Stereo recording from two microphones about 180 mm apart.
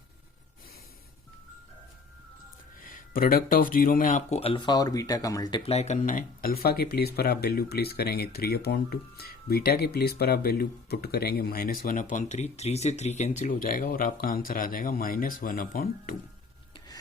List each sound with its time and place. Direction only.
2.8 s speech: 50° left (ahead or behind); by 5.7 s 25° left (ahead or behind)
5.7 s speech: 40° left (ahead or behind)